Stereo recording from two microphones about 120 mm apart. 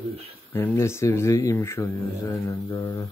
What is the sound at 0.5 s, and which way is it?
Speech, 20° left (ahead or behind).